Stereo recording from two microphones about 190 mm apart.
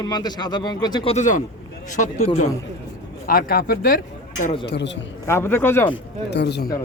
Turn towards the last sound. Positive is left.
turn(degrees=60)  # may be behind; listen again after turning